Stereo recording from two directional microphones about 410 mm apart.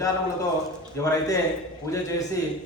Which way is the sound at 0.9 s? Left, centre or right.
Centre.